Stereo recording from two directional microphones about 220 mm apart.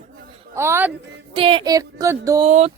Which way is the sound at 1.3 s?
25° right (ahead or behind).